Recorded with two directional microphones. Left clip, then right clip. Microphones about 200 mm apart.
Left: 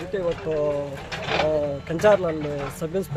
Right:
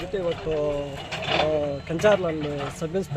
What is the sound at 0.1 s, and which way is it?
Speech, 5° left (ahead or behind).